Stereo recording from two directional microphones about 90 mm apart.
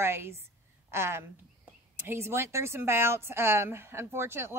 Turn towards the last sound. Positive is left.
turn(degrees=-25)  # may be behind; listen again after turning